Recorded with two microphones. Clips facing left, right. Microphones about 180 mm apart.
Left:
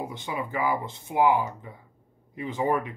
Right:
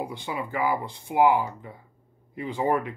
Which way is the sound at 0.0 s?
20° left (ahead or behind).